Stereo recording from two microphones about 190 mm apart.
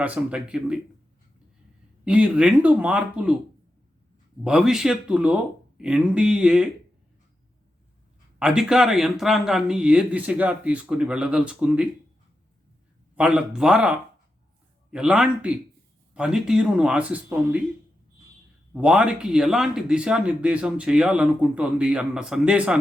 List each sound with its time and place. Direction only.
0.0 s speech: 5° right (ahead or behind)
2.0 s speech: 5° right (ahead or behind)
4.4 s speech: 5° right (ahead or behind)
8.4 s speech: 5° right (ahead or behind)
13.1 s speech: 5° right (ahead or behind)
18.7 s speech: 5° right (ahead or behind)